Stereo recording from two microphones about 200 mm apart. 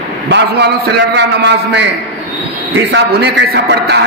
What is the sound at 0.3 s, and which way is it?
A man's voice, 55° right (ahead or behind).